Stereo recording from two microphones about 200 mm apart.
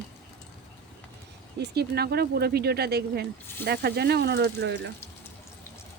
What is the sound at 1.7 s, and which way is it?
Speech, 55° right (ahead or behind).